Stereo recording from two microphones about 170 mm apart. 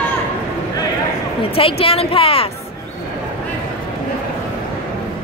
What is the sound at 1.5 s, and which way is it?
Speech, 35° left (ahead or behind).